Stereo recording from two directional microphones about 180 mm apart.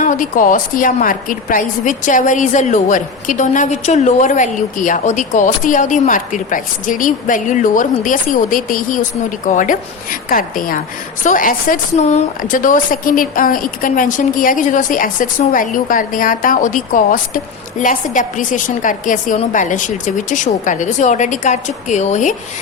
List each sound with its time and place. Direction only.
0.0 s a woman's voice: 45° left (ahead or behind)